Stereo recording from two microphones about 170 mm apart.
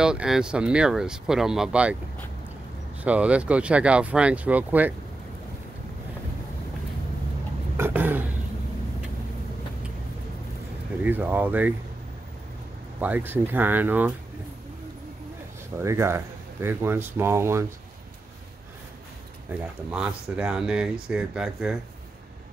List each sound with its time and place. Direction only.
0.0 s speech: 5° right (ahead or behind)
3.0 s speech: 10° right (ahead or behind)
7.7 s vehicle: 10° right (ahead or behind)
11.1 s speech: 10° right (ahead or behind)
13.0 s speech: 10° right (ahead or behind)
15.8 s speech: 15° right (ahead or behind)
19.9 s speech: 5° right (ahead or behind)